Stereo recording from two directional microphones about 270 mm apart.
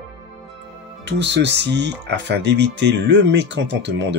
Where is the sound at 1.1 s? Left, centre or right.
Right.